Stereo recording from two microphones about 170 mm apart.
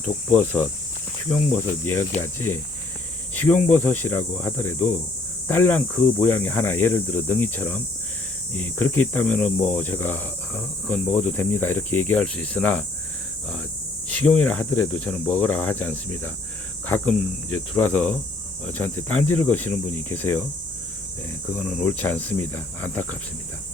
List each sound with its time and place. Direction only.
0.3 s speech: 10° left (ahead or behind)
1.8 s speech: 15° left (ahead or behind)
14.1 s speech: 10° left (ahead or behind)
21.5 s speech: 10° left (ahead or behind)